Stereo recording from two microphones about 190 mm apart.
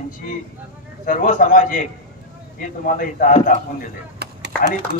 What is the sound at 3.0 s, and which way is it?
Speech, 45° left (ahead or behind).